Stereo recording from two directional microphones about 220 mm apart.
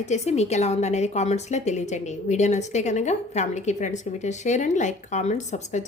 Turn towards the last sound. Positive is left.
turn(degrees=30)  # may be behind; listen again after turning